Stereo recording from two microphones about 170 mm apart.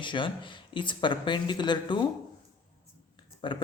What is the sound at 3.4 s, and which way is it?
Speech, 25° left (ahead or behind).